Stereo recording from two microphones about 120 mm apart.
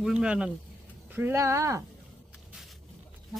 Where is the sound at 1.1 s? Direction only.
20° right (ahead or behind).